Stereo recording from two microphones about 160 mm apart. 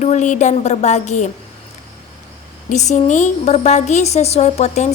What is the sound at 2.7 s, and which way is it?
A woman's voice, 45° left (ahead or behind).